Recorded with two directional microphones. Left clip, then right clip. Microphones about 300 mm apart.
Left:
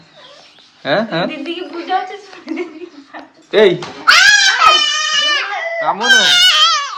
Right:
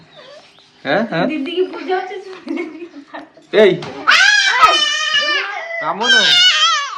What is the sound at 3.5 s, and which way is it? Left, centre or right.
Speech, centre.